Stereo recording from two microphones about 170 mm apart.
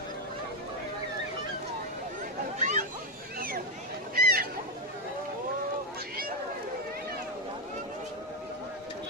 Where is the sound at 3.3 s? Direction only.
55° right (ahead or behind).